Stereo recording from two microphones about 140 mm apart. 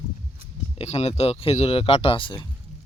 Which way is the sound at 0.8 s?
50° left (ahead or behind).